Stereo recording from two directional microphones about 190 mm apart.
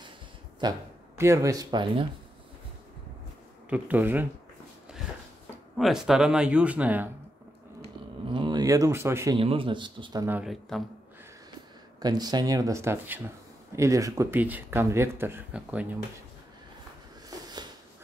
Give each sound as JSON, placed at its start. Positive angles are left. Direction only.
{"t": 0.6, "sound": "speech", "side_deg": -15}
{"t": 3.7, "sound": "speech", "side_deg": -10}
{"t": 5.8, "sound": "speech", "side_deg": 0}
{"t": 8.3, "sound": "speech", "side_deg": -25}
{"t": 9.4, "sound": "speech", "side_deg": -30}
{"t": 10.2, "sound": "speech", "side_deg": -5}
{"t": 12.0, "sound": "speech", "side_deg": -20}
{"t": 17.3, "sound": "a sound", "side_deg": -20}